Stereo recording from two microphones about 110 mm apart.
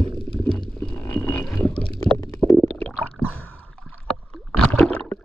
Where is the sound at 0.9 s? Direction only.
20° left (ahead or behind).